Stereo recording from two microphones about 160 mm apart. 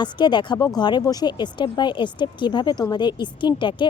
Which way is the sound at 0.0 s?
30° left (ahead or behind).